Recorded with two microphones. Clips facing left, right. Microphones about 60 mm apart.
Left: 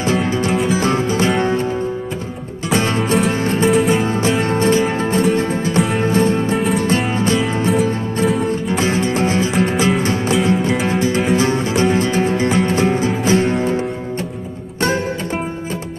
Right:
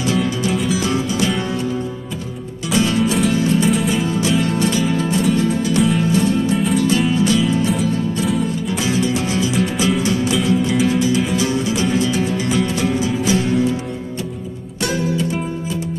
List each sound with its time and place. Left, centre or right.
0.0 s music: left
2.7 s music: left
3.6 s music: centre
4.0 s music: left
14.8 s music: left